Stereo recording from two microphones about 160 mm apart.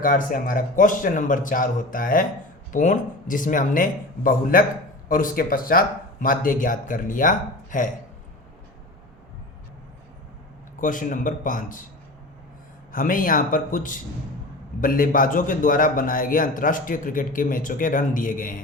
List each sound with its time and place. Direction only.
0.0 s a man's voice: 60° left (ahead or behind)
10.8 s a man's voice: 55° left (ahead or behind)
12.9 s a man's voice: 60° left (ahead or behind)